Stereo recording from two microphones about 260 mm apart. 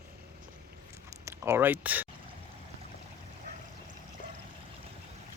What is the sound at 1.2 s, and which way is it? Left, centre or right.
Speech, centre.